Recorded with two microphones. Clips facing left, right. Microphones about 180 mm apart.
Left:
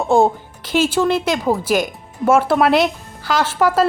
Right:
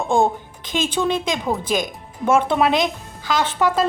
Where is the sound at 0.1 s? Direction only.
10° left (ahead or behind).